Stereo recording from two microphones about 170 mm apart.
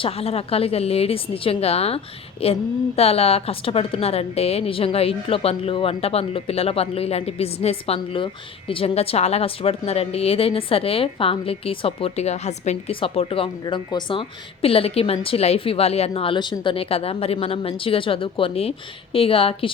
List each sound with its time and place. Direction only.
0.0 s a woman's voice: 35° left (ahead or behind)